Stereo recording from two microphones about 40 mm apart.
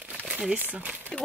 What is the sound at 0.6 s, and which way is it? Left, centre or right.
Speech, right.